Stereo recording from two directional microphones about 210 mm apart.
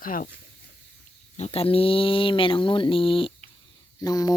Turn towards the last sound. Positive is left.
turn(degrees=15)  # may be behind; listen again after turning